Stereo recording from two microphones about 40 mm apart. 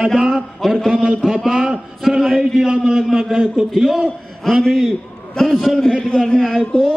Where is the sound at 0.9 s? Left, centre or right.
Right.